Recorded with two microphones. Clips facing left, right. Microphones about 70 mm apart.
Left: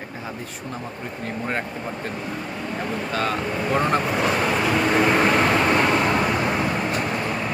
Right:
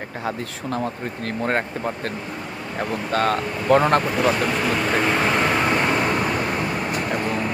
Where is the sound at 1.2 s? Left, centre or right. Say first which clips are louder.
Right 4 dB; right.